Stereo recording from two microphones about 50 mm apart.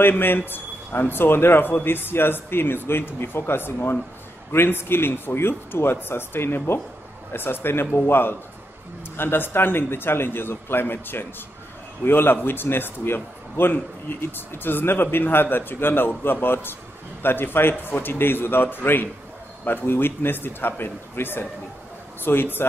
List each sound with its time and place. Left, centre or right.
0.1 s a man's voice: left